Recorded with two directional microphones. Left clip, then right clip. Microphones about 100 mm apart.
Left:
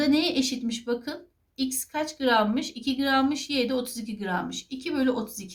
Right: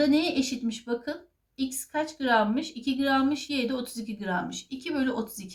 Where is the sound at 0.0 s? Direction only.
40° left (ahead or behind).